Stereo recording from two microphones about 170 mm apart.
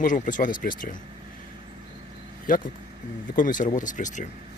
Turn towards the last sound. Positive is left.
turn(degrees=45)  # may be behind; listen again after turning